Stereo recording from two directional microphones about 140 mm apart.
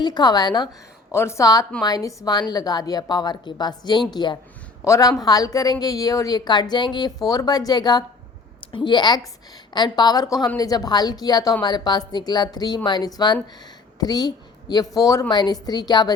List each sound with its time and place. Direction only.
0.0 s a woman's voice: 30° left (ahead or behind)
1.1 s a woman's voice: 20° left (ahead or behind)